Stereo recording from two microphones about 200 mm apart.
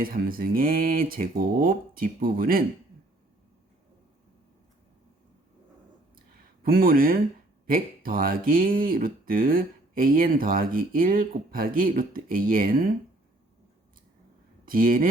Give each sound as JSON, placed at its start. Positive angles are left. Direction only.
{"t": 0.0, "sound": "speech", "side_deg": -45}
{"t": 6.6, "sound": "speech", "side_deg": -45}
{"t": 14.6, "sound": "speech", "side_deg": -45}